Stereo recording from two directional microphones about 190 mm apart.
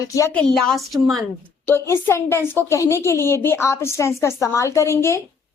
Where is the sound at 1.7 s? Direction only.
10° left (ahead or behind).